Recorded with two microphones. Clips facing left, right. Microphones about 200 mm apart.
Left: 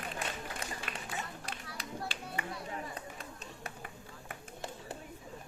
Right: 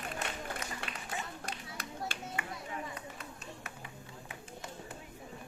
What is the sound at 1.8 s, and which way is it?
Music, 45° right (ahead or behind).